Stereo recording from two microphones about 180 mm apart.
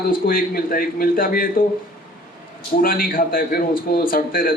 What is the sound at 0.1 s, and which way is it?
A man's voice, 50° left (ahead or behind).